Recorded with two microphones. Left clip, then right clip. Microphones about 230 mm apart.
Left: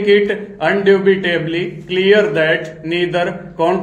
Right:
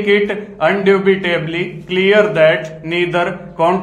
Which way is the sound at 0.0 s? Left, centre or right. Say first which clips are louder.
Left 1 dB; right.